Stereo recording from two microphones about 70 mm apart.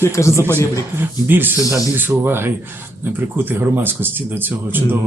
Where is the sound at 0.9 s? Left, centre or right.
Right.